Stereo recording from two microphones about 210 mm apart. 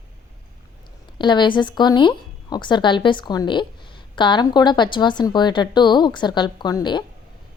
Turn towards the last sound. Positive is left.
turn(degrees=20)  # may be behind; listen again after turning